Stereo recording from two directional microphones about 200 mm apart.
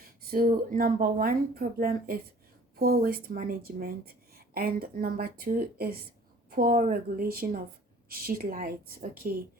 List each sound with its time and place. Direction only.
0.2 s speech: 50° right (ahead or behind)